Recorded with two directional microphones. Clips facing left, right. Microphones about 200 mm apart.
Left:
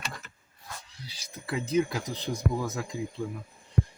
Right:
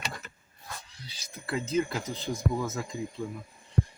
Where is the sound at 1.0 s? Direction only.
10° left (ahead or behind).